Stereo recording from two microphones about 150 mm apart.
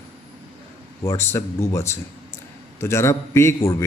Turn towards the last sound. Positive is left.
turn(degrees=15)  # may be behind; listen again after turning